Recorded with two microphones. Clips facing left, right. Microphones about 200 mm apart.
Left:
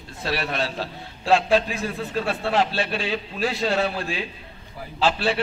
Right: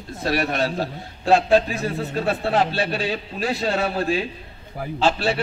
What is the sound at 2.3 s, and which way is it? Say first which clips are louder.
A man's voice: right 2 dB; 40° right (ahead or behind).